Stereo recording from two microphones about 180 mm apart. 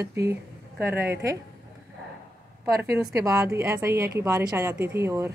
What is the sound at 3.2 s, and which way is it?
A woman's voice, 20° right (ahead or behind).